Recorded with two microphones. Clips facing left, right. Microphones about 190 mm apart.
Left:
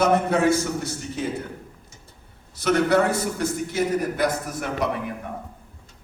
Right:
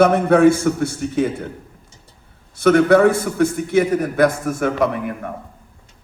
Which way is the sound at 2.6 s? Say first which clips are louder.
Right 7 dB; 55° right (ahead or behind).